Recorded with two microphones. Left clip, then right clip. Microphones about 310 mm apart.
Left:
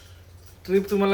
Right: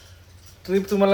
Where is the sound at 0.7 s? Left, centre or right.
Centre.